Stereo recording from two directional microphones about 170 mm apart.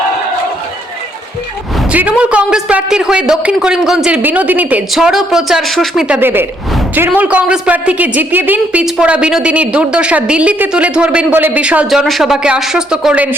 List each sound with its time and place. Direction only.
1.9 s a man's voice: 10° right (ahead or behind)